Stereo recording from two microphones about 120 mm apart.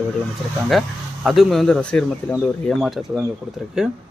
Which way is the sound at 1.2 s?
Centre (ahead or behind).